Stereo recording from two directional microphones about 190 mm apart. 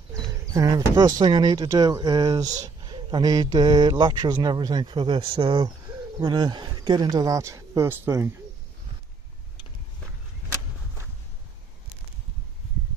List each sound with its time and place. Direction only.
0.5 s speech: 20° right (ahead or behind)